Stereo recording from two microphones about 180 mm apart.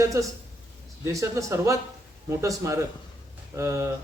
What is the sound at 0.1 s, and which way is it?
Speech, 15° right (ahead or behind).